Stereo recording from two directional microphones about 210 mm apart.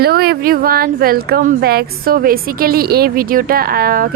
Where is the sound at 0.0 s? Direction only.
45° right (ahead or behind).